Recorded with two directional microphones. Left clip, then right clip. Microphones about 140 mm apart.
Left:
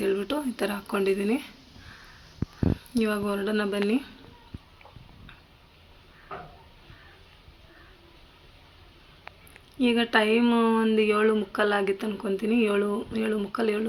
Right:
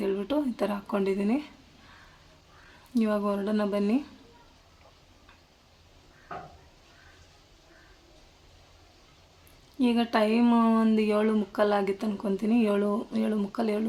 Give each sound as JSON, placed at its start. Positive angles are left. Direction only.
{"t": 0.0, "sound": "speech", "side_deg": -10}
{"t": 2.9, "sound": "speech", "side_deg": -15}
{"t": 9.7, "sound": "speech", "side_deg": -20}